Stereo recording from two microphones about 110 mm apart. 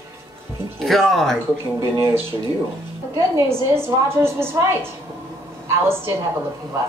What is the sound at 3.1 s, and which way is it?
A woman's voice, 25° right (ahead or behind).